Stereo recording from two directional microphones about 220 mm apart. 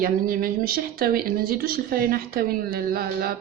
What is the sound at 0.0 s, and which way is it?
Speech, 40° right (ahead or behind).